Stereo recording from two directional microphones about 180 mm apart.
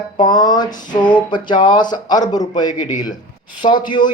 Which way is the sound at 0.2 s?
25° left (ahead or behind).